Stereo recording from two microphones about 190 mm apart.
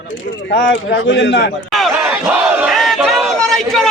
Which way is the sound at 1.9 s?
5° right (ahead or behind).